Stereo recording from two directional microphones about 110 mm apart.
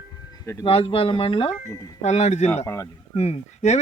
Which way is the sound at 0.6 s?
60° left (ahead or behind).